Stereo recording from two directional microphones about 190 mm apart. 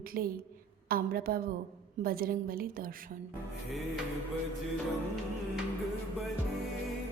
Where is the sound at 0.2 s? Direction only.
50° right (ahead or behind).